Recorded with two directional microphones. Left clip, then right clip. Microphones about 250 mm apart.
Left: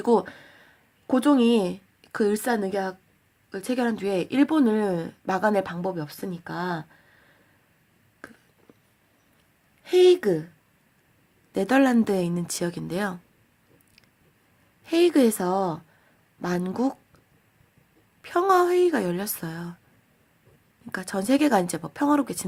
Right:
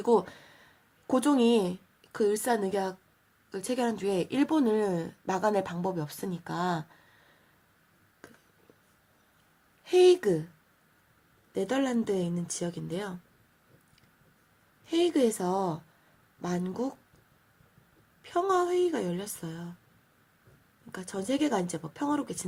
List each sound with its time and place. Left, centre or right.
0.0 s a woman's voice: centre
8.2 s a sound: left
9.8 s a woman's voice: left
11.5 s speech: left
14.8 s a woman's voice: left
18.2 s speech: left
20.9 s speech: left